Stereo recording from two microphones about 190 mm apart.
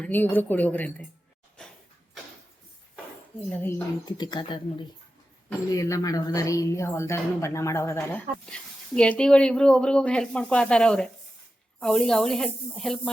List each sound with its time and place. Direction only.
0.0 s a woman's voice: 10° left (ahead or behind)
1.6 s a sound: 5° left (ahead or behind)
3.5 s a woman's voice: 10° left (ahead or behind)
5.7 s a woman's voice: 15° left (ahead or behind); by 13.0 s centre (ahead or behind)